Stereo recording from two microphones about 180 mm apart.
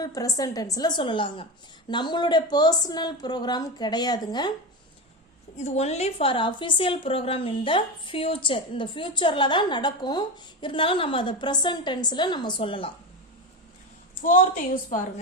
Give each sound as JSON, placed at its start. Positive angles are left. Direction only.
{"t": 0.0, "sound": "a woman's voice", "side_deg": 20}
{"t": 5.5, "sound": "a woman's voice", "side_deg": 35}
{"t": 14.2, "sound": "a woman's voice", "side_deg": 50}